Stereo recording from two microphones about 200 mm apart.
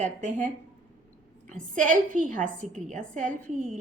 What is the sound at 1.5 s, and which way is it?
A woman's voice, 40° right (ahead or behind).